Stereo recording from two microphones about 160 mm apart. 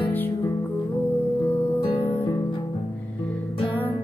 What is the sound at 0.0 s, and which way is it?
Music, 10° left (ahead or behind).